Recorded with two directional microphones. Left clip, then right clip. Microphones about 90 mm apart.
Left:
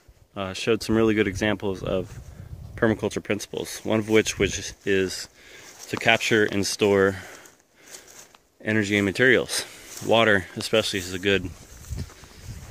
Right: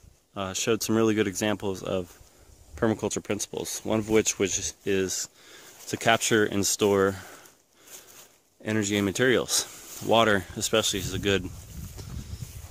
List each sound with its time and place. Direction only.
0.3 s speech: 40° right (ahead or behind)
2.7 s a sound: 25° right (ahead or behind)
3.0 s speech: 35° right (ahead or behind)
5.9 s speech: 90° right
6.4 s speech: 45° right (ahead or behind); by 7.3 s 25° right (ahead or behind)
8.6 s speech: 25° right (ahead or behind); by 11.4 s 45° right (ahead or behind)